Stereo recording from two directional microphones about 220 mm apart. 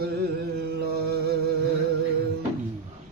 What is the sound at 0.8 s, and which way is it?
Music, 45° right (ahead or behind).